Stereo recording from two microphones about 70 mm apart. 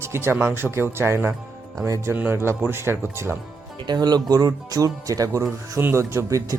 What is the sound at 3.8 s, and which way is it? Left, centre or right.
Speech, right.